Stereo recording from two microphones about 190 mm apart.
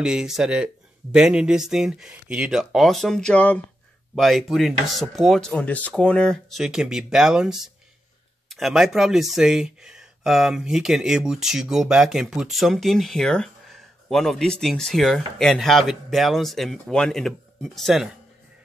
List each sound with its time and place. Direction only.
0.0 s speech: 5° right (ahead or behind)